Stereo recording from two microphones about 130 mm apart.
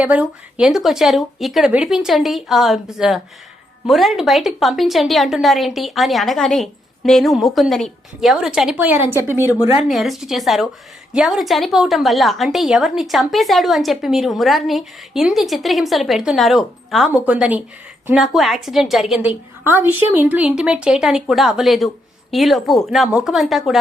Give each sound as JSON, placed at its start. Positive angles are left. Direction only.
{"t": 0.0, "sound": "a woman's voice", "side_deg": -10}
{"t": 9.9, "sound": "a woman's voice", "side_deg": 0}
{"t": 19.6, "sound": "a woman's voice", "side_deg": -15}